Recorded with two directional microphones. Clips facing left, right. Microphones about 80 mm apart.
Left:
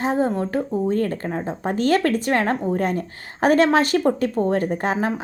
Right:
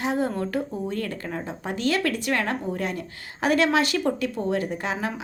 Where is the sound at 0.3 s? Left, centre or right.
Left.